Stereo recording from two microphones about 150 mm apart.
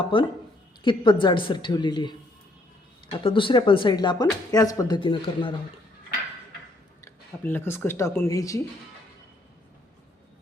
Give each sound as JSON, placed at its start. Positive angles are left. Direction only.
{"t": 0.1, "sound": "speech", "side_deg": 35}
{"t": 4.9, "sound": "speech", "side_deg": 35}
{"t": 7.0, "sound": "speech", "side_deg": 15}